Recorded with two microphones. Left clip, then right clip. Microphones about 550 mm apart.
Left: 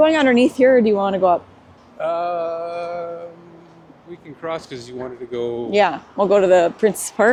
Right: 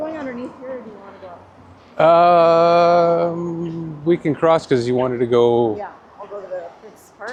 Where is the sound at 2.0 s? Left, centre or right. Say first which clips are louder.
Right 10 dB; right.